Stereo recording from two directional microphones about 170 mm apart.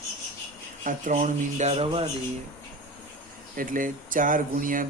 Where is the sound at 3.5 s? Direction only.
55° right (ahead or behind).